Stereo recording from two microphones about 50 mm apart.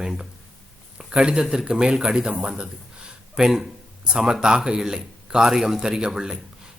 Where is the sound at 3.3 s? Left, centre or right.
Centre.